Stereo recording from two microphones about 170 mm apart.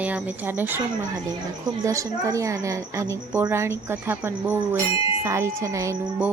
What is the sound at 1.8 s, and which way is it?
A woman's voice, 20° right (ahead or behind).